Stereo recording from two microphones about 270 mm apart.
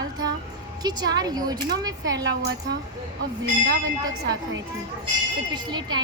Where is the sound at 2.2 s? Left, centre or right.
Right.